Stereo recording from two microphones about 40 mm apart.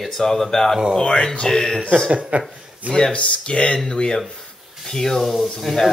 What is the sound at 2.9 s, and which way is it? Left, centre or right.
Speech, centre.